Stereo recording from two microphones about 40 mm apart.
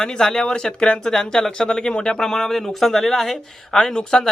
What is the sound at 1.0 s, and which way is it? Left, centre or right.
Speech, centre.